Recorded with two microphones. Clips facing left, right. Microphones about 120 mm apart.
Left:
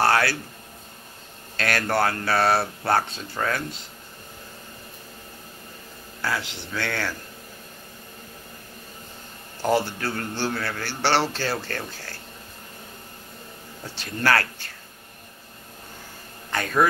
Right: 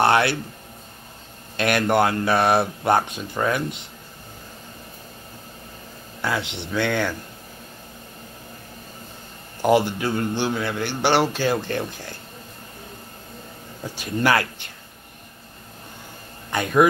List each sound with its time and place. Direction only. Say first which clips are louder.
0.0 s speech: right 3 dB; 20° right (ahead or behind)
1.6 s a man's voice: right 4 dB; 20° right (ahead or behind)
6.2 s speech: right 3 dB; 20° right (ahead or behind)
9.6 s a man's voice: right 4 dB; 15° right (ahead or behind)
13.8 s a man's voice: right 3 dB; 15° right (ahead or behind)
16.4 s speech: right 5 dB; 15° right (ahead or behind)